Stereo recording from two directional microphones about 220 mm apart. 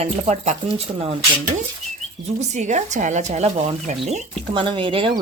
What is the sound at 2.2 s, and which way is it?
Speech, 30° right (ahead or behind).